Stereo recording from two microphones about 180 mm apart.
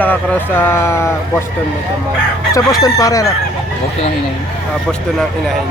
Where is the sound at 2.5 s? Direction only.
20° left (ahead or behind).